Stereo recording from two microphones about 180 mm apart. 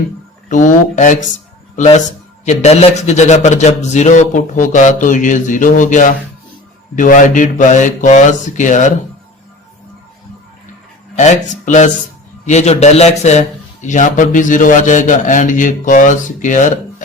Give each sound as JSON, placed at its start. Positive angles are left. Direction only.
{"t": 0.4, "sound": "a man's voice", "side_deg": 45}
{"t": 11.2, "sound": "a man's voice", "side_deg": 40}